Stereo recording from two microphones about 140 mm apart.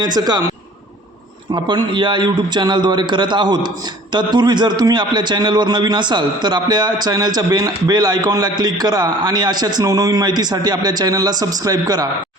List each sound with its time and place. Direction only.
0.0 s a man's voice: 30° right (ahead or behind)
1.5 s a man's voice: 30° right (ahead or behind)